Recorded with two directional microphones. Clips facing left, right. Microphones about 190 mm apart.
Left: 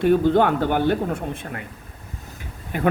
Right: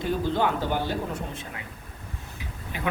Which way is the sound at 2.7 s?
50° left (ahead or behind).